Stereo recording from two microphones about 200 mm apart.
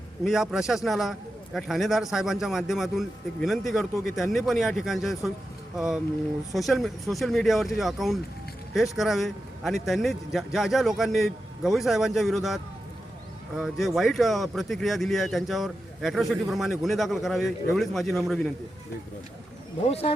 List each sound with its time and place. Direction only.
0.3 s speech: centre (ahead or behind)
13.6 s speech: centre (ahead or behind)
19.8 s speech: 30° left (ahead or behind)